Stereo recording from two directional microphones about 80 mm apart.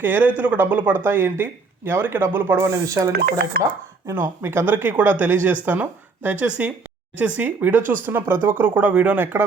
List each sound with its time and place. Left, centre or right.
0.0 s speech: right
2.6 s speech: right
4.1 s speech: right